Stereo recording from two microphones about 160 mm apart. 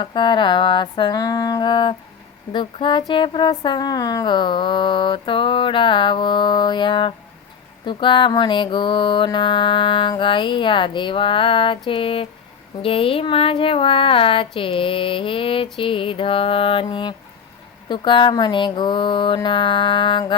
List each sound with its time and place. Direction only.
0.0 s a woman's voice: 30° left (ahead or behind)
7.9 s mantra: 30° left (ahead or behind)
17.8 s a woman's voice: 30° left (ahead or behind)